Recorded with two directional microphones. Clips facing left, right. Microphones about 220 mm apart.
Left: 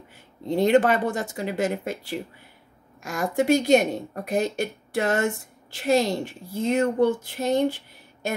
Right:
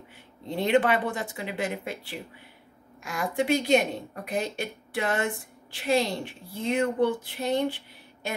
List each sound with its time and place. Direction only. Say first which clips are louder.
0.6 s a woman's voice: left 4 dB; 40° left (ahead or behind)